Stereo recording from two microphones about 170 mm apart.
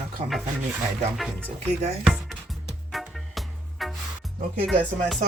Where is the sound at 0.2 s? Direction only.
45° right (ahead or behind).